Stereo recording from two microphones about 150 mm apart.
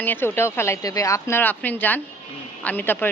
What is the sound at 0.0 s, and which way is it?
A woman's voice, 15° left (ahead or behind).